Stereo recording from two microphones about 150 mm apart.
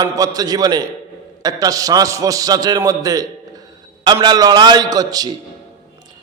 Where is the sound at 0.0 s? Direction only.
25° right (ahead or behind).